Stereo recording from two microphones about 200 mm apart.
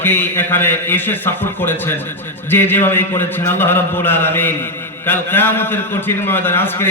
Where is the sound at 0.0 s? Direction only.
10° left (ahead or behind).